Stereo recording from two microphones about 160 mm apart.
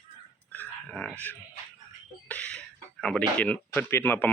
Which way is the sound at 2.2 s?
10° left (ahead or behind).